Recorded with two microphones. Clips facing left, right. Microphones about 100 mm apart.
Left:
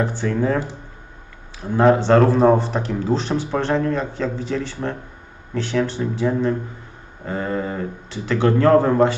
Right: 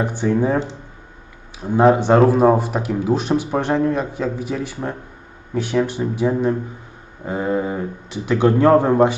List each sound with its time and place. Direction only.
0.0 s speech: 15° right (ahead or behind)